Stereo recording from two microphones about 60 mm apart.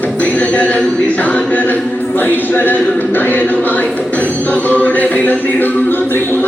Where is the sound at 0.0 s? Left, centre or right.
Left.